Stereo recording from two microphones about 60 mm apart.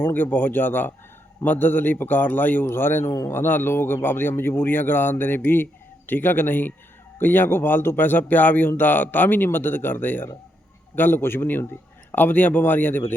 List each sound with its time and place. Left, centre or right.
0.0 s speech: left